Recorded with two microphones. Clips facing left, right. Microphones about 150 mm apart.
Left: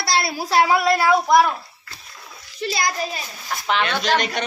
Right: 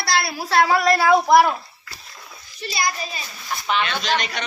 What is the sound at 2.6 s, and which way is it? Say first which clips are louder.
Speech: left 2 dB; 90° left.